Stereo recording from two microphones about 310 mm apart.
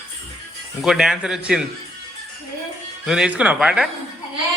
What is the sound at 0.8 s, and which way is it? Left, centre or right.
Speech, centre.